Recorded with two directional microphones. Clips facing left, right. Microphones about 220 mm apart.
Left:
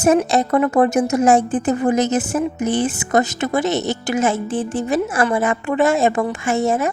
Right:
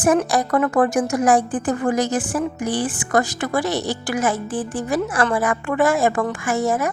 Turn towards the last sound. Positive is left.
turn(degrees=25)  # may be behind; listen again after turning